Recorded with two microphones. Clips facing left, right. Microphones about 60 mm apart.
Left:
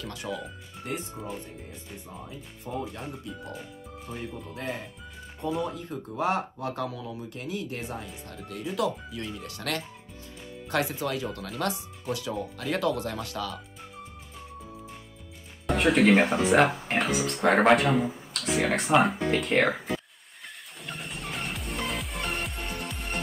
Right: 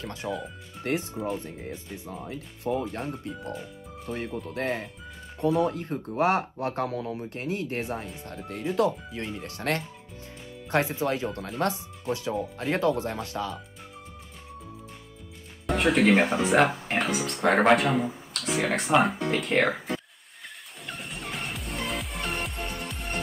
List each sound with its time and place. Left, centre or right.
0.0 s speech: right
0.8 s speech: right
2.9 s speech: right
4.3 s speech: centre
4.6 s speech: right
15.6 s speech: centre
20.8 s music: centre